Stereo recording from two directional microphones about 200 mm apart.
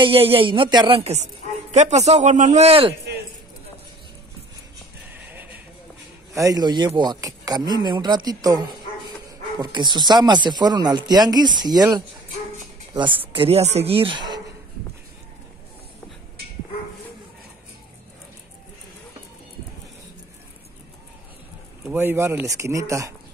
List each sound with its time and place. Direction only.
0.0 s a man's voice: 30° right (ahead or behind)
5.1 s neigh: 10° right (ahead or behind)
6.3 s a man's voice: 15° right (ahead or behind)
21.9 s speech: 10° right (ahead or behind)